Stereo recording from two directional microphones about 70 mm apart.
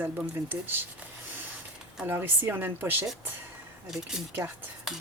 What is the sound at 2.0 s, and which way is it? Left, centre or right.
Speech, right.